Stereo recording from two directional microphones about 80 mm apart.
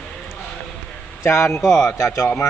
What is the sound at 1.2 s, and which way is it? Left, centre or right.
Speech, left.